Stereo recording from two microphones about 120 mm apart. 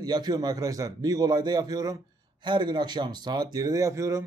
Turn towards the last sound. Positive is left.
turn(degrees=-25)  # may be behind; listen again after turning